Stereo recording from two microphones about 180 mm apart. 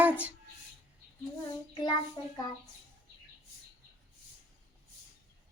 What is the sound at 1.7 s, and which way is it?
Child singing, 25° left (ahead or behind).